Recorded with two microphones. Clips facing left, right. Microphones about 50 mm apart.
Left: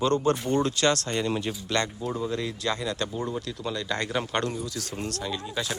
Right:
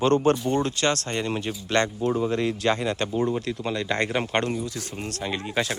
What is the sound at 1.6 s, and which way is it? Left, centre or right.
Speech, right.